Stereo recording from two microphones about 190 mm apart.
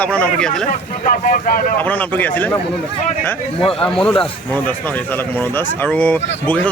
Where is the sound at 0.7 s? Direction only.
45° left (ahead or behind).